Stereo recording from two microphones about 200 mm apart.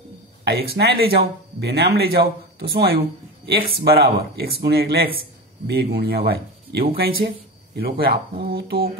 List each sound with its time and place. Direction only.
0.5 s speech: 55° right (ahead or behind)